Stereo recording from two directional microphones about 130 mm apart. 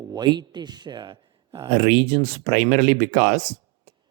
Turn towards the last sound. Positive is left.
turn(degrees=-60)  # may be behind; listen again after turning